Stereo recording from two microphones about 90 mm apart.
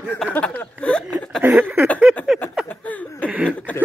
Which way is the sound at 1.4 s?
20° right (ahead or behind).